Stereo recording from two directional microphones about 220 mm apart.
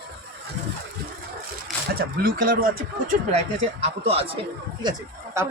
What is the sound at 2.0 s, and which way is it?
Speech, 40° right (ahead or behind).